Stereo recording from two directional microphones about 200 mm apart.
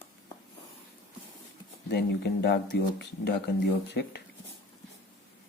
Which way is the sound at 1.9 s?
55° left (ahead or behind).